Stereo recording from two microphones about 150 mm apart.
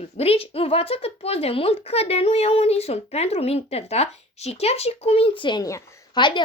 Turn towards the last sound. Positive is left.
turn(degrees=30)  # may be behind; listen again after turning